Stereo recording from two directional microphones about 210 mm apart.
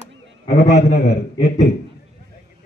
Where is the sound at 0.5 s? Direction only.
50° left (ahead or behind).